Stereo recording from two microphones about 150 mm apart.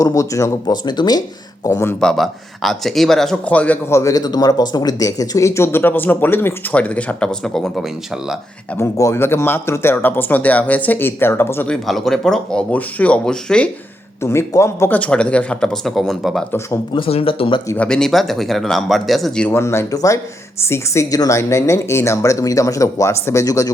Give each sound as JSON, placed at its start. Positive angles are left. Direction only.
{"t": 0.0, "sound": "a woman's voice", "side_deg": 20}
{"t": 2.0, "sound": "speech", "side_deg": 5}
{"t": 8.8, "sound": "speech", "side_deg": 20}
{"t": 11.7, "sound": "speech", "side_deg": 0}
{"t": 14.2, "sound": "speech", "side_deg": 20}
{"t": 16.9, "sound": "speech", "side_deg": 40}
{"t": 17.7, "sound": "speech", "side_deg": 5}
{"t": 19.5, "sound": "a woman's voice", "side_deg": 15}